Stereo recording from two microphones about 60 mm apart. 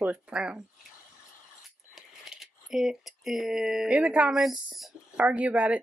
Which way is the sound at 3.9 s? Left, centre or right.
Right.